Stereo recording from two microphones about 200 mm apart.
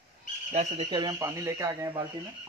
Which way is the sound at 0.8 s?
20° right (ahead or behind).